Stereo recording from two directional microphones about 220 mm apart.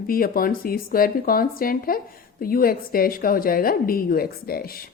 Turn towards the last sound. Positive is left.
turn(degrees=45)  # may be behind; listen again after turning